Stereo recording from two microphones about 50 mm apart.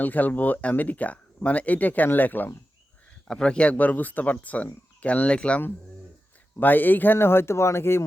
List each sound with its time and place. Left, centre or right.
0.0 s speech: left
3.2 s speech: centre
6.6 s speech: left